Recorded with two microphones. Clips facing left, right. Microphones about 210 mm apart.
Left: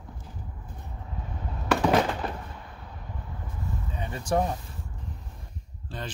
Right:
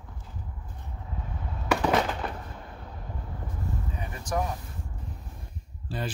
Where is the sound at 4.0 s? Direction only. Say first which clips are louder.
Left 5 dB; 30° left (ahead or behind).